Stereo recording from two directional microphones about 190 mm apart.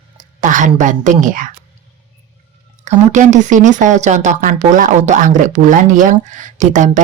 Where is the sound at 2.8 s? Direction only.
40° right (ahead or behind).